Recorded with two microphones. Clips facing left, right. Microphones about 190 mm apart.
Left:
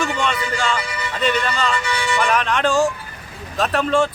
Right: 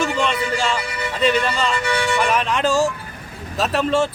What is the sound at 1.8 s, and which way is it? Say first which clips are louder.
Speech: right 3 dB; 60° right (ahead or behind).